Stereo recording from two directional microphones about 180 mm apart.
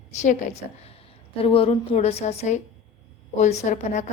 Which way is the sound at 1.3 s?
30° left (ahead or behind).